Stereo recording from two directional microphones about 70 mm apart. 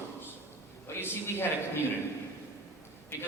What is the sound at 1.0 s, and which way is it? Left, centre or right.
Speech, left.